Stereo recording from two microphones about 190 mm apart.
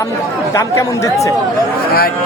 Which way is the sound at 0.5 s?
15° left (ahead or behind).